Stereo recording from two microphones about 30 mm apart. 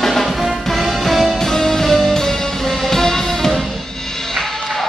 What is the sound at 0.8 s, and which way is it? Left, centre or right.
Music, centre.